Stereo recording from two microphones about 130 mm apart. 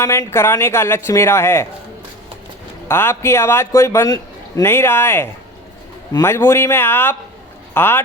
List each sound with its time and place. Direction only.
0.0 s a man's voice: 20° left (ahead or behind)
2.9 s a man's voice: 15° left (ahead or behind)